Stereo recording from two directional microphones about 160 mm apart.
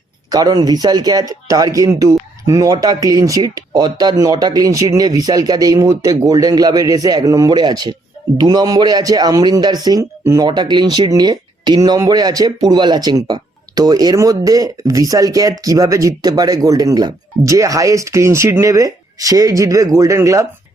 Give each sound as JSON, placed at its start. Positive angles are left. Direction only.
{"t": 0.3, "sound": "speech", "side_deg": -25}